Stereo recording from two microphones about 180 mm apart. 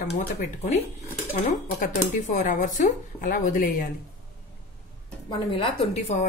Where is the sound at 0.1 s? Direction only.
40° left (ahead or behind).